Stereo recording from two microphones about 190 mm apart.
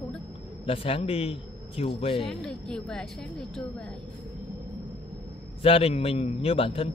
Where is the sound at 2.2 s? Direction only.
5° left (ahead or behind).